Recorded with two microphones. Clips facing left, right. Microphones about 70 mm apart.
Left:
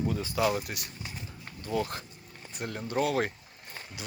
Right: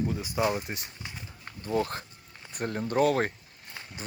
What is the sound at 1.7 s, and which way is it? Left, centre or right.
Speech, right.